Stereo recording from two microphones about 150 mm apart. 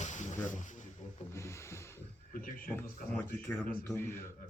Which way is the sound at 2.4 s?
70° left (ahead or behind).